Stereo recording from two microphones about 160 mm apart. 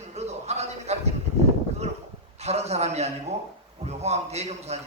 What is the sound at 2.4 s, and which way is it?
A man's voice, 45° right (ahead or behind).